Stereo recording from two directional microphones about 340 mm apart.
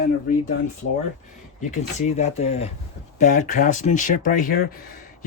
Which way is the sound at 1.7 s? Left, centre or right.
Centre.